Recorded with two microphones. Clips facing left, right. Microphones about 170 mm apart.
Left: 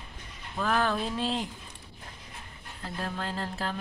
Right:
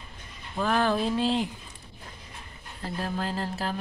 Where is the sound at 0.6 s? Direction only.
Centre (ahead or behind).